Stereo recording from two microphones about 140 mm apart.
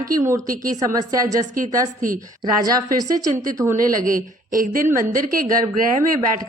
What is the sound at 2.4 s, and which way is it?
Speech, 25° right (ahead or behind).